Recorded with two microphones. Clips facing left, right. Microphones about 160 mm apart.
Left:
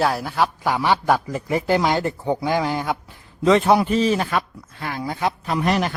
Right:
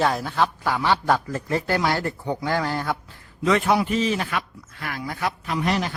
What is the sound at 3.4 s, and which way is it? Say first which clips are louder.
Speech: left 4 dB; 30° left (ahead or behind).